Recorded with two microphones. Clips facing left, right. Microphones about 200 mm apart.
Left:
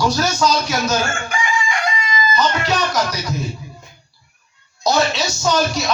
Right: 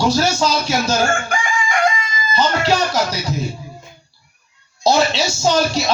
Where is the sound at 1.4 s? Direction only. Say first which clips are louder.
Right 3 dB; 50° right (ahead or behind).